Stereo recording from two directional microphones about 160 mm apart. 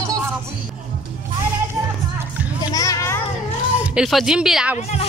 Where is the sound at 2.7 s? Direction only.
20° left (ahead or behind).